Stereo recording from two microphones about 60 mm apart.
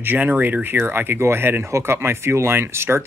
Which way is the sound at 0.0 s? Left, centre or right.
Right.